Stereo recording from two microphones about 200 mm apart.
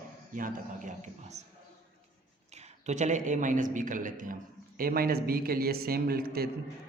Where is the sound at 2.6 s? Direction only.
35° right (ahead or behind).